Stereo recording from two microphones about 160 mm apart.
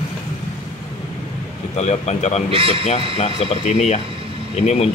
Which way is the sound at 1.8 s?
45° left (ahead or behind).